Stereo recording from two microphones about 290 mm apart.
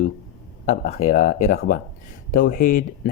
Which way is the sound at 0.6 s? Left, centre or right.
Left.